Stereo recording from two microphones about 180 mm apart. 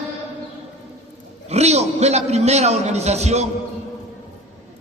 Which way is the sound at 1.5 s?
35° right (ahead or behind).